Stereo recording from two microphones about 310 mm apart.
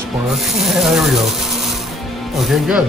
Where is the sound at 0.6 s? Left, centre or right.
Centre.